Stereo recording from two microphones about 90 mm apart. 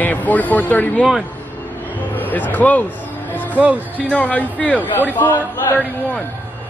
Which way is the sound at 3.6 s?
15° right (ahead or behind).